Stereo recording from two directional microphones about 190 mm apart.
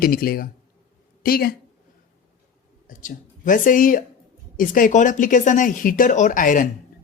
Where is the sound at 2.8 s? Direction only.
45° left (ahead or behind).